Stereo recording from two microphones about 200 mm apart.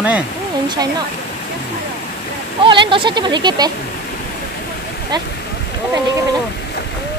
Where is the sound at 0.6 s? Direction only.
20° right (ahead or behind).